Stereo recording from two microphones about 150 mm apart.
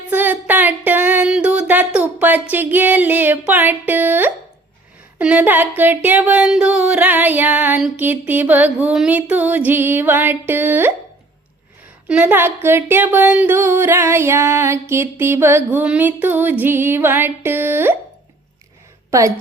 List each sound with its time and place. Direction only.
0.1 s a sound: 10° right (ahead or behind)
5.1 s speech: 10° right (ahead or behind)
12.0 s speech: 10° right (ahead or behind)
19.1 s speech: 20° right (ahead or behind)